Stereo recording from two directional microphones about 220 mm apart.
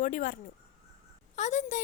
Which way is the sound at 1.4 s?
35° left (ahead or behind).